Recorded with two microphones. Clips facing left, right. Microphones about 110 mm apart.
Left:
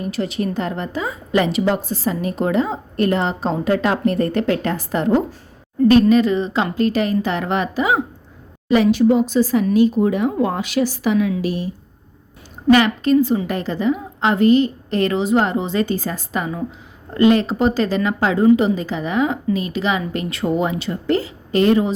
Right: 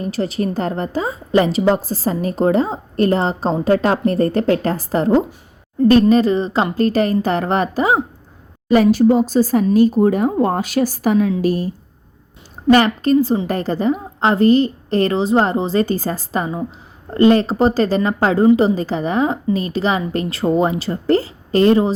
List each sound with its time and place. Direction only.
0.0 s a woman's voice: 35° right (ahead or behind)
12.7 s a woman's voice: 40° right (ahead or behind)